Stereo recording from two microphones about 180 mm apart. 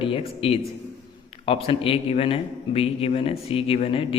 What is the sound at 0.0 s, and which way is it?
A man's voice, 30° left (ahead or behind).